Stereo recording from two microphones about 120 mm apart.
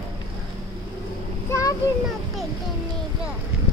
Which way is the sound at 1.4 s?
30° left (ahead or behind).